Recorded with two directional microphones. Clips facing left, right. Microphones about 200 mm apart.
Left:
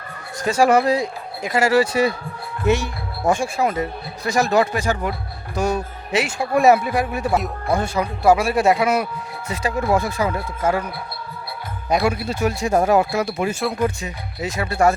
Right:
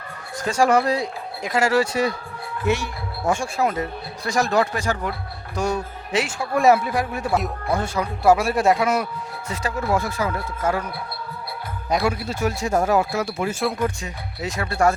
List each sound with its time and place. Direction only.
0.4 s speech: 5° left (ahead or behind)
2.6 s speech: 20° left (ahead or behind)
3.4 s speech: centre (ahead or behind)
8.2 s speech: centre (ahead or behind)
11.9 s speech: 15° left (ahead or behind)
13.6 s speech: 5° left (ahead or behind)